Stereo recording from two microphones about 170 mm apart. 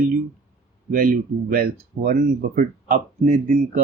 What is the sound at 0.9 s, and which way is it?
Speech, 55° right (ahead or behind).